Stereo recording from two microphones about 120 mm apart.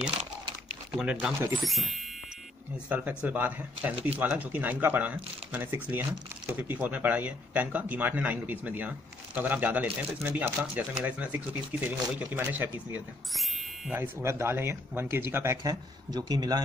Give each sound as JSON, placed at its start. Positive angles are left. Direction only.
{"t": 0.9, "sound": "speech", "side_deg": -5}
{"t": 2.9, "sound": "speech", "side_deg": -10}
{"t": 13.3, "sound": "speech", "side_deg": 0}
{"t": 13.9, "sound": "speech", "side_deg": -20}
{"t": 15.6, "sound": "speech", "side_deg": -35}